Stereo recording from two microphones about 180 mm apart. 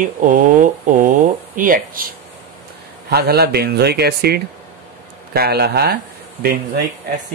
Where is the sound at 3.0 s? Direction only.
65° right (ahead or behind).